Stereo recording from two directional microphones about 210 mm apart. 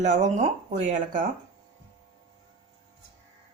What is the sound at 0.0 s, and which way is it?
Speech, 35° right (ahead or behind).